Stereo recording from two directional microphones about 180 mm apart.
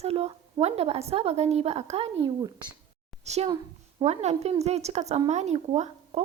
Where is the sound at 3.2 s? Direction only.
35° right (ahead or behind).